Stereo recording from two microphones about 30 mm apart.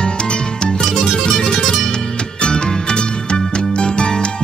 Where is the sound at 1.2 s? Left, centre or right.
Left.